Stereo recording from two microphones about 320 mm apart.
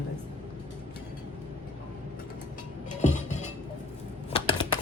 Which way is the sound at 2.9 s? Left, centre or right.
Left.